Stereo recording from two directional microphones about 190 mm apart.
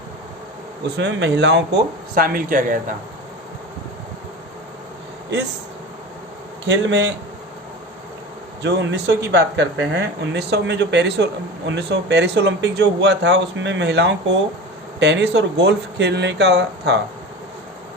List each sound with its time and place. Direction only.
0.9 s speech: 70° right (ahead or behind); by 2.8 s 45° right (ahead or behind)
6.7 s speech: 70° right (ahead or behind)
8.6 s speech: 65° right (ahead or behind)